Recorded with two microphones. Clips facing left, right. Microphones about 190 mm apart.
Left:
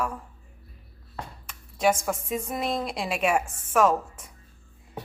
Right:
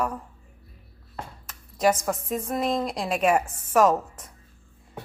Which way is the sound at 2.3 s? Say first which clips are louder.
Right 5 dB; 5° left (ahead or behind).